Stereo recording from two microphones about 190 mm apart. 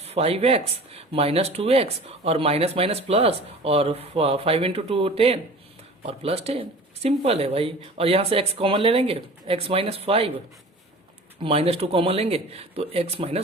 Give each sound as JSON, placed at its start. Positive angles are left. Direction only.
{"t": 0.0, "sound": "speech", "side_deg": -30}
{"t": 11.4, "sound": "speech", "side_deg": -30}